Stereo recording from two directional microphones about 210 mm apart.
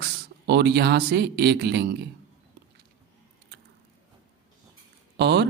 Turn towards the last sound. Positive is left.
turn(degrees=-55)  # may be behind; listen again after turning